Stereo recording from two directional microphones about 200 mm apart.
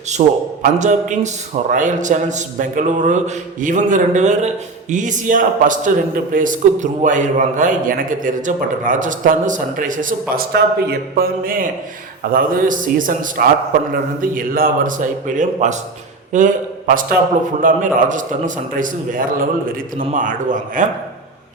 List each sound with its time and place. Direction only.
0.1 s a man's voice: 35° right (ahead or behind)